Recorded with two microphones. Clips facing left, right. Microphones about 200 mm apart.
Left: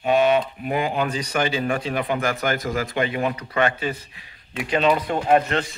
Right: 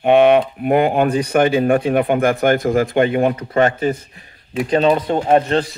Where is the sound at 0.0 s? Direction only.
60° right (ahead or behind); by 4.4 s 45° right (ahead or behind).